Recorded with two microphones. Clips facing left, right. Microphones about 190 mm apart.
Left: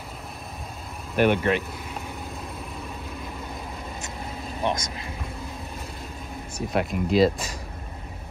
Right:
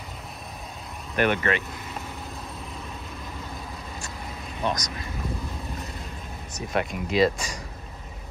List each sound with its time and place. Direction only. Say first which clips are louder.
1.1 s speech: left 3 dB; 5° left (ahead or behind)
4.6 s speech: left 1 dB; 25° left (ahead or behind)
6.7 s speech: left 3 dB; centre (ahead or behind)